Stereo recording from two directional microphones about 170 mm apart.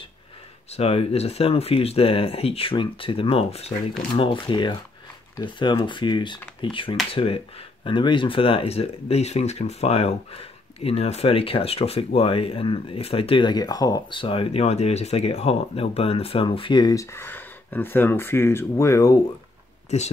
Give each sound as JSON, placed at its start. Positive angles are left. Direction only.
{"t": 0.7, "sound": "speech", "side_deg": 35}